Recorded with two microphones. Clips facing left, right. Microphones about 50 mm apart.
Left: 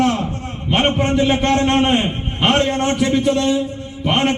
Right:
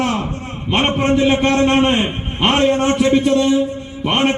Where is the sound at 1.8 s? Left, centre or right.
Centre.